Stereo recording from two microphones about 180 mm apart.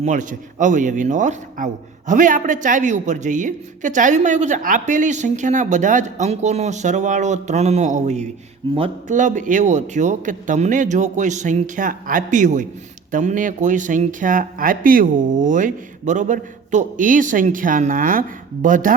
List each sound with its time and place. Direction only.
0.0 s speech: 45° right (ahead or behind)